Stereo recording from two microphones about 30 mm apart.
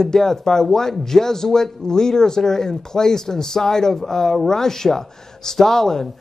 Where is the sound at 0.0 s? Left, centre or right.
Centre.